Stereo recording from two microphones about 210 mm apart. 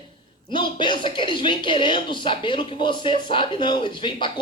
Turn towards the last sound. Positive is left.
turn(degrees=25)  # may be behind; listen again after turning